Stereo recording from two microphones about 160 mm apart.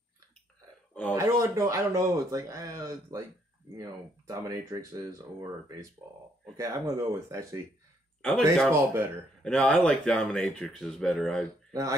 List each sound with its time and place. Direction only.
1.1 s speech: 20° right (ahead or behind)
8.2 s speech: 5° left (ahead or behind)
8.7 s speech: 15° right (ahead or behind)
9.4 s speech: 5° left (ahead or behind)
11.7 s speech: 20° right (ahead or behind)